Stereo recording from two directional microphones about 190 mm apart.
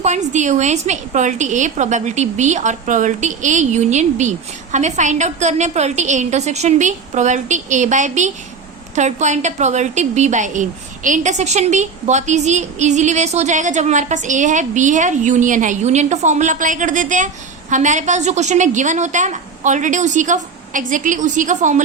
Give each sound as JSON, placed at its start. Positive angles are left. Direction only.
{"t": 0.0, "sound": "a woman's voice", "side_deg": -40}